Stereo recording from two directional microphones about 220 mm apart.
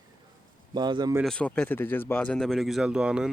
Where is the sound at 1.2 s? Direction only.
5° left (ahead or behind).